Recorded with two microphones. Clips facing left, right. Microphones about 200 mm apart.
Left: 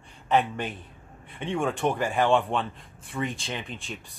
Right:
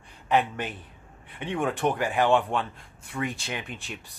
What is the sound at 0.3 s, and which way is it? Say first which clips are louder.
Speech: even; 10° right (ahead or behind).